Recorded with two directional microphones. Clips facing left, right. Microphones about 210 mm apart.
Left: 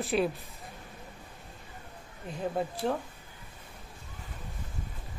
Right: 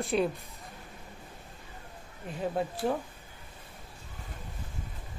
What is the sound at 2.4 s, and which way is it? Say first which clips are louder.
Speech: right 1 dB; centre (ahead or behind).